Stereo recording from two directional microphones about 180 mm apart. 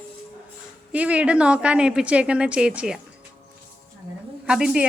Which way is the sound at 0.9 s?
5° right (ahead or behind).